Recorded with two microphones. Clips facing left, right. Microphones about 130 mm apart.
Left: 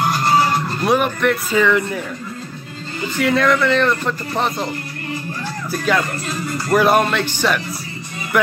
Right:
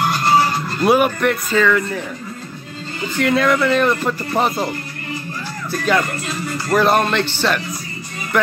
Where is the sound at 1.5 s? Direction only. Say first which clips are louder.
Even; 15° left (ahead or behind).